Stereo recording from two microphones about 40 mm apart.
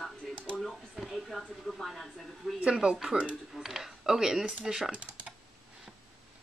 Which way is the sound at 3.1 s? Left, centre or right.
Right.